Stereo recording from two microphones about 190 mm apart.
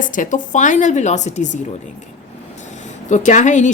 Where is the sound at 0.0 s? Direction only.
45° left (ahead or behind).